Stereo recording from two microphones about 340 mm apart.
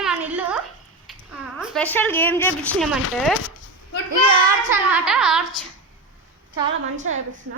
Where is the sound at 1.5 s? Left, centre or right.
Centre.